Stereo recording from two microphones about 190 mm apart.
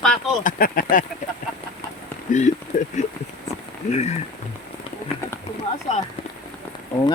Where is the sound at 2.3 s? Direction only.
40° left (ahead or behind).